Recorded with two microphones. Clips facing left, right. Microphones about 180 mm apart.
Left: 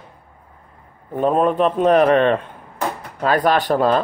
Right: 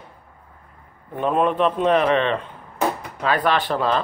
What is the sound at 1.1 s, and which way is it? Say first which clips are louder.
A man's voice: left 3 dB; 40° left (ahead or behind).